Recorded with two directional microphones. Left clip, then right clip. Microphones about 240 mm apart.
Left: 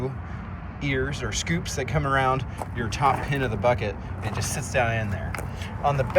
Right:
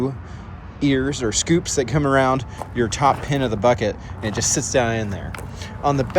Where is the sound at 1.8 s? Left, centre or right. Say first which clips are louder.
Right 8 dB; right.